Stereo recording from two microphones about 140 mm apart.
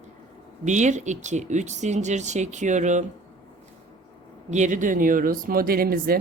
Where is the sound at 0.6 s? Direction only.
60° right (ahead or behind).